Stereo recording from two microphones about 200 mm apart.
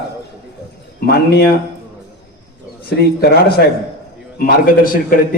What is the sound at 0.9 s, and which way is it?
Speech, 50° left (ahead or behind).